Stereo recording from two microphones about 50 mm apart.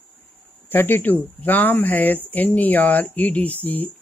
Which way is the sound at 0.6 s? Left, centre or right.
Left.